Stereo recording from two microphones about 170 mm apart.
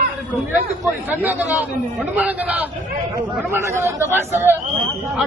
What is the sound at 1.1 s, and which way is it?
Speech, 10° right (ahead or behind).